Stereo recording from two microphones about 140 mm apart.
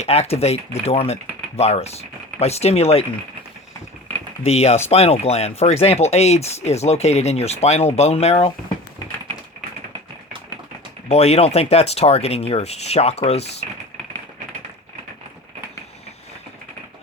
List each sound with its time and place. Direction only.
0.0 s speech: 50° left (ahead or behind)
4.4 s speech: 45° left (ahead or behind)
11.1 s speech: 50° left (ahead or behind)